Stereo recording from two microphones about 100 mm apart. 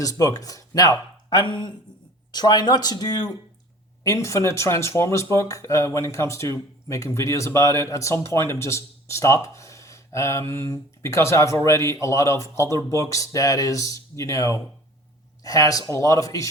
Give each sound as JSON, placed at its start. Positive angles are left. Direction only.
{"t": 0.0, "sound": "speech", "side_deg": 35}